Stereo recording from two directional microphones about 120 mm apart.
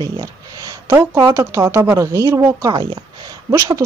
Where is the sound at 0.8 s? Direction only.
25° right (ahead or behind).